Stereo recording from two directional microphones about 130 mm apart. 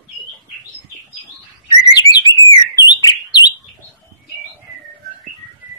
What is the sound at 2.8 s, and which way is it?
Bird, 35° left (ahead or behind).